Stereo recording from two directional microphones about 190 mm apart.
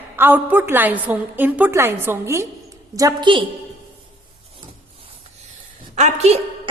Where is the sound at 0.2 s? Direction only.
10° right (ahead or behind).